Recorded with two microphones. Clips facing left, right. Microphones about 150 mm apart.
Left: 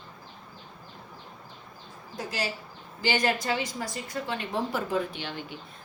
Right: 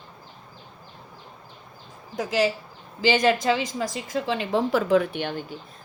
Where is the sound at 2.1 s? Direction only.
90° right; by 5.5 s 45° right (ahead or behind).